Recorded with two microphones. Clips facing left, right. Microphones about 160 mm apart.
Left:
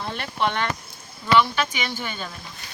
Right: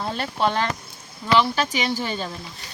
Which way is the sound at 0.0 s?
35° right (ahead or behind).